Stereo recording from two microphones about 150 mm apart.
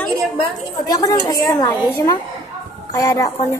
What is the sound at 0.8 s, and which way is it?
Speech, 25° left (ahead or behind).